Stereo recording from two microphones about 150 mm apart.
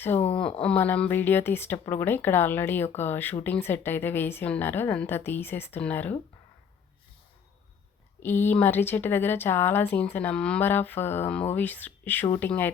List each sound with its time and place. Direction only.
0.2 s speech: 40° left (ahead or behind)
0.6 s a woman's voice: 10° left (ahead or behind)
8.2 s a woman's voice: 15° left (ahead or behind)